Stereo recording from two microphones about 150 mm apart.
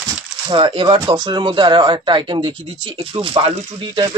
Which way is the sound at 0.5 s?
35° right (ahead or behind).